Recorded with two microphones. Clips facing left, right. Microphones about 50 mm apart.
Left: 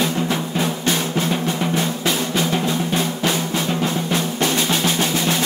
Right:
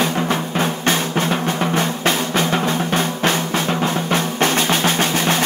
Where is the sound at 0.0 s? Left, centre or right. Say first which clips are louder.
Right 2 dB; right.